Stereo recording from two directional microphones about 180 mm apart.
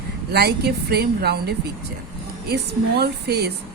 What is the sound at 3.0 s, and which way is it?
Speech, 65° right (ahead or behind).